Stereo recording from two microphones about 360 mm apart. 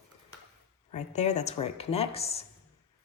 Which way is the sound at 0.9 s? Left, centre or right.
Centre.